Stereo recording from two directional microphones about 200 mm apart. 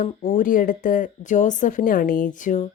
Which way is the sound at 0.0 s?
40° left (ahead or behind).